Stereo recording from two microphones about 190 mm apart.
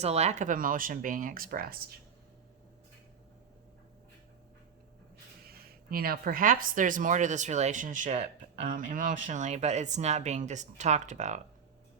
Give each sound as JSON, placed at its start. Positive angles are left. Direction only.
{"t": 0.0, "sound": "speech", "side_deg": -35}
{"t": 5.5, "sound": "speech", "side_deg": -50}